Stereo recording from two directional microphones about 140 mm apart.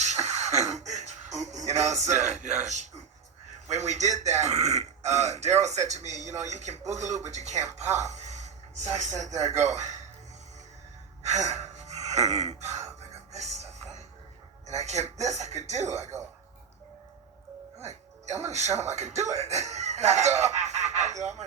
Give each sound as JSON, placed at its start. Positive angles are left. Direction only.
{"t": 0.0, "sound": "music", "side_deg": -55}
{"t": 2.6, "sound": "speech", "side_deg": -55}
{"t": 11.2, "sound": "gasp", "side_deg": -55}
{"t": 13.3, "sound": "speech", "side_deg": -55}
{"t": 14.7, "sound": "speech", "side_deg": -55}
{"t": 18.5, "sound": "speech", "side_deg": -55}